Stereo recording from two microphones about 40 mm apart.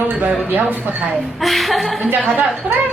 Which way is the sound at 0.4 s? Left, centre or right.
Right.